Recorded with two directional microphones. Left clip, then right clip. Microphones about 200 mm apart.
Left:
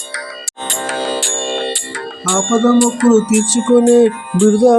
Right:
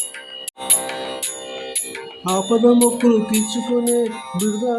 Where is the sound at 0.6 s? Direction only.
30° left (ahead or behind).